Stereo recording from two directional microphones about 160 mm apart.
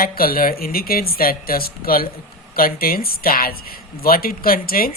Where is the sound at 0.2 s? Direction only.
65° left (ahead or behind).